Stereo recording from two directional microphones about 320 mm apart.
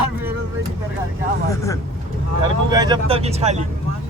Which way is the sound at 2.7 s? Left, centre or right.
Centre.